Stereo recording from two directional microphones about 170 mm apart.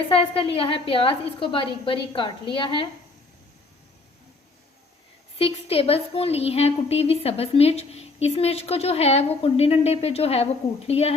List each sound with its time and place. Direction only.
0.1 s a woman's voice: 35° left (ahead or behind)
5.4 s a woman's voice: 35° left (ahead or behind)